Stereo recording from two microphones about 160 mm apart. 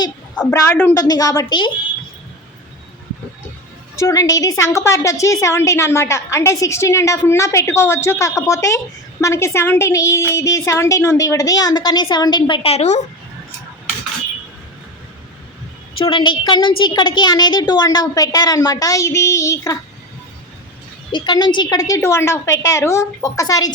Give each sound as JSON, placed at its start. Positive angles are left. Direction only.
{"t": 0.5, "sound": "a woman's voice", "side_deg": 15}
{"t": 0.9, "sound": "a woman's voice", "side_deg": 25}
{"t": 3.9, "sound": "a woman's voice", "side_deg": 20}
{"t": 16.0, "sound": "a woman's voice", "side_deg": 30}
{"t": 21.1, "sound": "a woman's voice", "side_deg": 30}